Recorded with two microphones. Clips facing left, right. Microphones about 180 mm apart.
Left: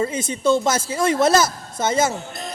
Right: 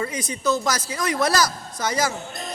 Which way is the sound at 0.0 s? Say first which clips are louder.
Left 5 dB; 25° left (ahead or behind).